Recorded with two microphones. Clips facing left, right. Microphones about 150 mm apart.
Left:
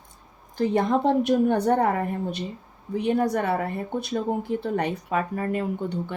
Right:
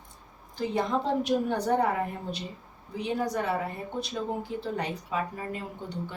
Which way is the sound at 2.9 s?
55° left (ahead or behind).